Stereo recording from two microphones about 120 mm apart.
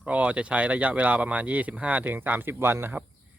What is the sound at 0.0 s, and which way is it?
Speech, 10° right (ahead or behind).